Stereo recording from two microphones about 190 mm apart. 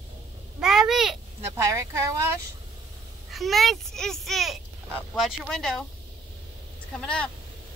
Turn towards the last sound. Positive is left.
turn(degrees=5)  # may be behind; listen again after turning